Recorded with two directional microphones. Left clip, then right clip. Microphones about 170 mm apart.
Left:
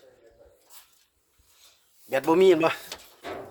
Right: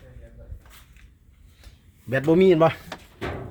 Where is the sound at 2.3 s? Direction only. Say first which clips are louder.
Right 2 dB; 20° left (ahead or behind).